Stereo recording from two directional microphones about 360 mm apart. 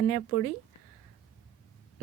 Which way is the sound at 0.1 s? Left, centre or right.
Left.